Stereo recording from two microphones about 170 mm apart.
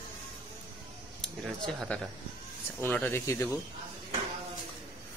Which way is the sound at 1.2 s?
5° left (ahead or behind).